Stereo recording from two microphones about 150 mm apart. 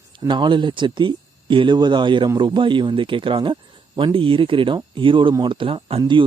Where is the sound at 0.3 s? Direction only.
30° right (ahead or behind).